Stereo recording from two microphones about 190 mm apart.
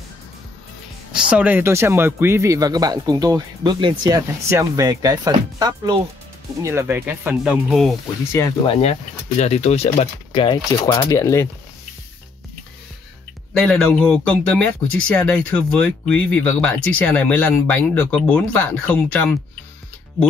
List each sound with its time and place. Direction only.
1.3 s speech: 10° right (ahead or behind)
8.3 s speech: 15° left (ahead or behind)
9.4 s speech: 35° left (ahead or behind)
10.9 s speech: 15° left (ahead or behind)
13.5 s speech: 5° left (ahead or behind)